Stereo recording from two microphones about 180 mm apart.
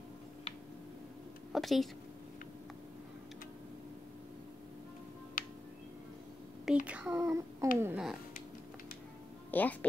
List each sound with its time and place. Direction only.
1.5 s speech: centre (ahead or behind)
5.4 s music: 50° left (ahead or behind)
6.6 s speech: 5° right (ahead or behind)
9.5 s speech: 10° left (ahead or behind)